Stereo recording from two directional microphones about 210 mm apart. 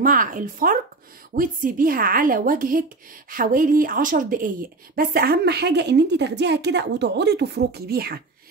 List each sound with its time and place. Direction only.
0.0 s a woman's voice: 40° right (ahead or behind)